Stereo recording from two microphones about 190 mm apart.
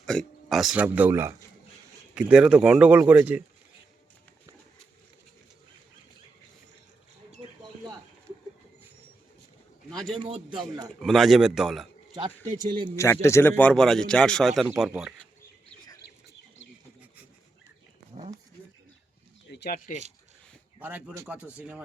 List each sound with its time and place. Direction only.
0.0 s speech: 5° left (ahead or behind)
11.0 s speech: centre (ahead or behind)
12.5 s speech: 25° right (ahead or behind)
13.2 s speech: 15° left (ahead or behind); by 15.1 s 5° right (ahead or behind)
19.5 s a sound: 60° left (ahead or behind)
20.7 s speech: 10° right (ahead or behind)